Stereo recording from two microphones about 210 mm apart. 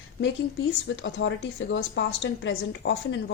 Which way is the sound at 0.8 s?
60° left (ahead or behind).